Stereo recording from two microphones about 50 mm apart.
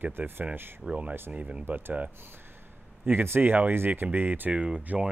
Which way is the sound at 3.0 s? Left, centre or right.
Right.